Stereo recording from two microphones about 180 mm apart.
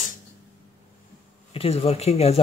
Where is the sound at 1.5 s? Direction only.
35° left (ahead or behind).